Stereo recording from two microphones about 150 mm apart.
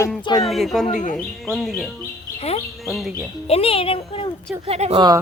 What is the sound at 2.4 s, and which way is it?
Speech, 40° left (ahead or behind).